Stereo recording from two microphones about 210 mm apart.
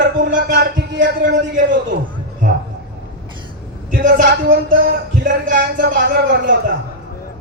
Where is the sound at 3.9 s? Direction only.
40° right (ahead or behind).